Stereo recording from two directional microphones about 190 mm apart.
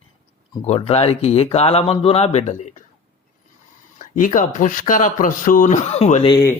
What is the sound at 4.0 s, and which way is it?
Speech, 45° left (ahead or behind).